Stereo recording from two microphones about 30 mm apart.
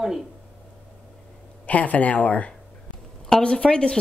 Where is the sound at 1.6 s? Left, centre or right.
Left.